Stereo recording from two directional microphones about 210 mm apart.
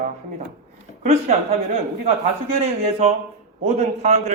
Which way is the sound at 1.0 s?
30° right (ahead or behind).